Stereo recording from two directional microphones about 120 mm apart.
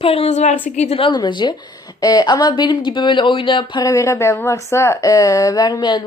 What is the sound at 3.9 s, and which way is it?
A woman's voice, 25° left (ahead or behind).